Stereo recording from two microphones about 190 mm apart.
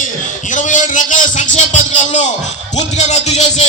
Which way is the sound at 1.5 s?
40° left (ahead or behind).